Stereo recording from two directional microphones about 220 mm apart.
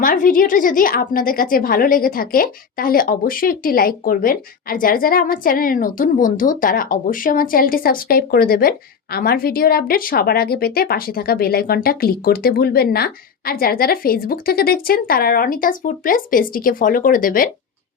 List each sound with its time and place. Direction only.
0.0 s a woman's voice: 40° left (ahead or behind)